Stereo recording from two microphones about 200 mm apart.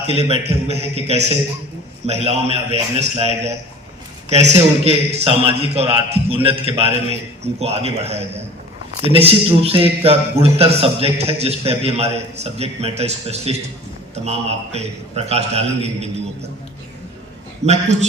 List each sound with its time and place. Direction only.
0.1 s a man's voice: 30° right (ahead or behind)
17.6 s a man's voice: 35° right (ahead or behind)